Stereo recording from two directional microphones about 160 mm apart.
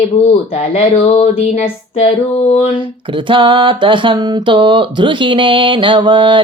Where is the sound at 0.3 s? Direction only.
40° left (ahead or behind).